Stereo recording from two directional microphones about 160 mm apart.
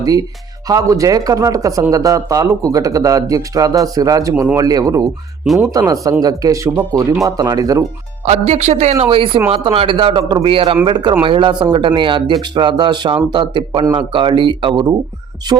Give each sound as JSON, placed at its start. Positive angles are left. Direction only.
{"t": 0.0, "sound": "a man's voice", "side_deg": -20}
{"t": 8.2, "sound": "a woman's voice", "side_deg": -45}